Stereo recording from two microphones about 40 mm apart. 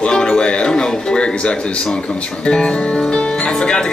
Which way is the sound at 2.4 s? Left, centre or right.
Left.